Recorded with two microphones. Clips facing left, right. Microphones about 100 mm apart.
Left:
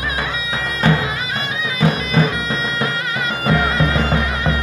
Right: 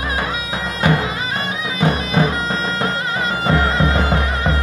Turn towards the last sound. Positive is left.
turn(degrees=-30)  # may be behind; listen again after turning